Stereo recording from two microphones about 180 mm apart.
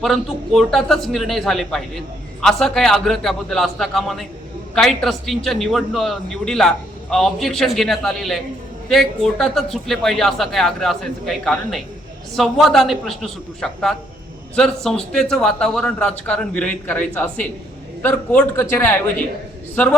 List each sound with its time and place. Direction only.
0.0 s a man's voice: centre (ahead or behind)